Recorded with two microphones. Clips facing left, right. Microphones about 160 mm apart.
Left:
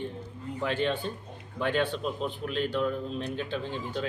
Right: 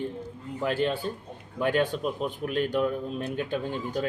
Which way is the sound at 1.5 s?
10° right (ahead or behind).